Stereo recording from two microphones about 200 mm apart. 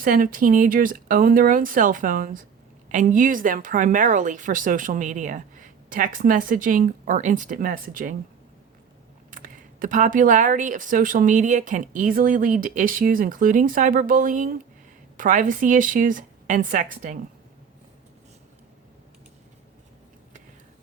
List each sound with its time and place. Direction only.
0.0 s speech: 45° right (ahead or behind)
9.3 s speech: 45° right (ahead or behind)